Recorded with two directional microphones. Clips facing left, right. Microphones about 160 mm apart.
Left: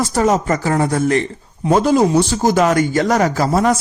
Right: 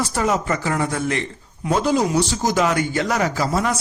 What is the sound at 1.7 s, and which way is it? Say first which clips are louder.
A man's voice: left 5 dB; 50° left (ahead or behind).